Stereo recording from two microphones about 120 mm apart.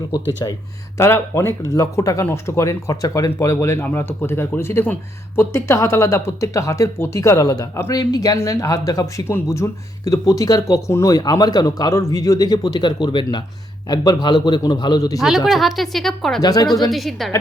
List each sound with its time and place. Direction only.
0.1 s a man's voice: 30° left (ahead or behind)
15.4 s speech: centre (ahead or behind)
16.4 s a man's voice: 35° left (ahead or behind)
16.9 s speech: centre (ahead or behind)